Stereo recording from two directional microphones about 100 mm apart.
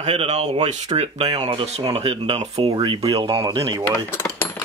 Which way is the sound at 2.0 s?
75° right (ahead or behind).